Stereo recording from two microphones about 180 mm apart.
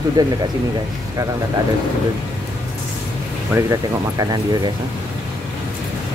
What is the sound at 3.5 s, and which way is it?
Speech, 20° right (ahead or behind).